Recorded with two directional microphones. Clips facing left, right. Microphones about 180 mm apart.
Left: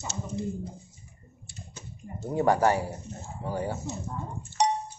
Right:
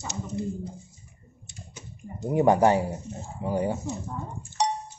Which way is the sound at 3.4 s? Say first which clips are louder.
Right 5 dB; 15° right (ahead or behind).